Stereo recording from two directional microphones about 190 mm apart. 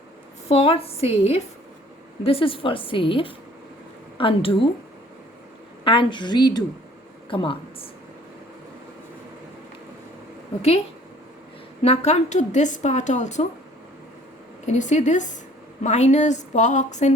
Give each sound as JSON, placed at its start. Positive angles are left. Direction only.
{"t": 0.4, "sound": "a woman's voice", "side_deg": 30}
{"t": 5.8, "sound": "a woman's voice", "side_deg": 25}
{"t": 11.8, "sound": "a woman's voice", "side_deg": 35}
{"t": 14.7, "sound": "a woman's voice", "side_deg": 40}